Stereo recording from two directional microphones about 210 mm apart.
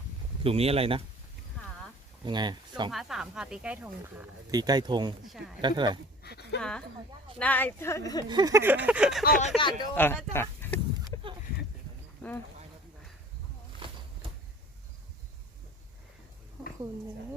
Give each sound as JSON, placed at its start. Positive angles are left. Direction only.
{"t": 0.4, "sound": "speech", "side_deg": -30}
{"t": 2.2, "sound": "speech", "side_deg": -20}
{"t": 2.9, "sound": "speech", "side_deg": 0}
{"t": 6.2, "sound": "dog", "side_deg": 50}
{"t": 6.6, "sound": "a woman's voice", "side_deg": 5}
{"t": 8.3, "sound": "speech", "side_deg": -20}
{"t": 9.2, "sound": "speech", "side_deg": 40}
{"t": 9.9, "sound": "a woman's voice", "side_deg": 10}
{"t": 10.3, "sound": "a sound", "side_deg": 10}
{"t": 13.7, "sound": "a sound", "side_deg": -25}